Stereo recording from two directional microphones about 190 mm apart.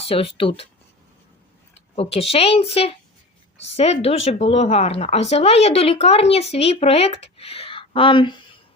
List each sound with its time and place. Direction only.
0.1 s speech: 30° left (ahead or behind)
2.0 s speech: 30° left (ahead or behind)